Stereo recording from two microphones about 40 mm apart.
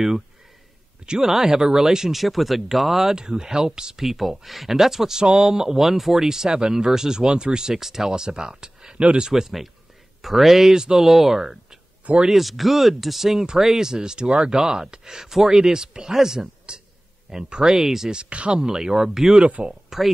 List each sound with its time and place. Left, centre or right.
1.2 s speech: centre
3.2 s speech: centre
6.2 s speech: centre
7.7 s speech: centre
9.3 s speech: centre
16.7 s a sound: right
17.3 s speech: centre
18.1 s speech: right
18.5 s speech: centre